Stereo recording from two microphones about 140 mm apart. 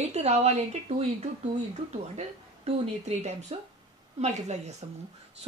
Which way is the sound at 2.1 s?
55° right (ahead or behind).